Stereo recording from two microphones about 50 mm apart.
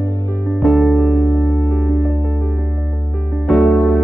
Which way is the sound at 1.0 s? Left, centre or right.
Right.